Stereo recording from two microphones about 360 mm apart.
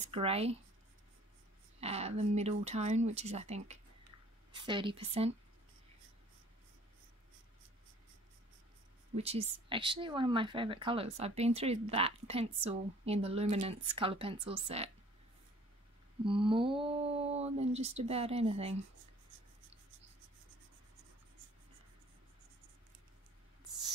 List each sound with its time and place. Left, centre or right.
0.0 s speech: centre
1.8 s speech: centre
9.1 s speech: centre
16.3 s speech: centre